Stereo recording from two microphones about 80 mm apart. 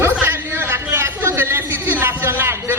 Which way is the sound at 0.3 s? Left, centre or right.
Right.